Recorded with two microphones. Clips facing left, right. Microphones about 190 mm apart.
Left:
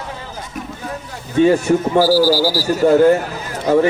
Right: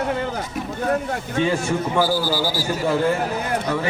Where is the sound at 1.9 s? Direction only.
35° left (ahead or behind).